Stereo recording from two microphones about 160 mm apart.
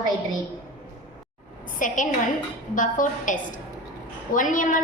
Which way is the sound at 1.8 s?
55° left (ahead or behind).